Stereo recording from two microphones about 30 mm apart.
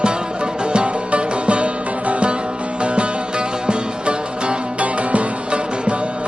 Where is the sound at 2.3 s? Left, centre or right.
Right.